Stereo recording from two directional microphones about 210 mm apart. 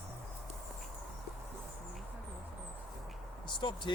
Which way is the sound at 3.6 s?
20° left (ahead or behind).